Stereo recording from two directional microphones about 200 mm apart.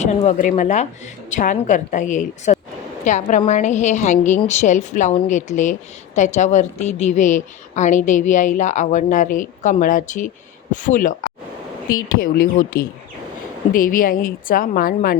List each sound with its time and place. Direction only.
0.3 s a woman's voice: 40° left (ahead or behind)